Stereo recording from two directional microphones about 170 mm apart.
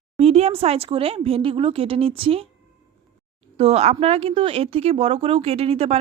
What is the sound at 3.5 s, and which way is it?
A woman's voice, 40° right (ahead or behind).